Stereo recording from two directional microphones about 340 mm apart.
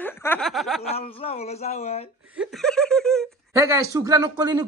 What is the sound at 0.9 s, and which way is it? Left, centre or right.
Speech, centre.